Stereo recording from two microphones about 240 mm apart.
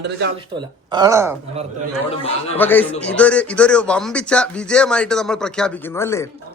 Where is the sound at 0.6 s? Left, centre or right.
Centre.